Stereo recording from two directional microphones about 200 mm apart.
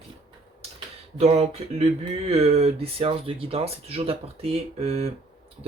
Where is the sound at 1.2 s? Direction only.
30° right (ahead or behind).